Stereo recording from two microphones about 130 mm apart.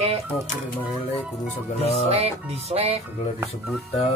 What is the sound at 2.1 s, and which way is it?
Speech, 50° right (ahead or behind).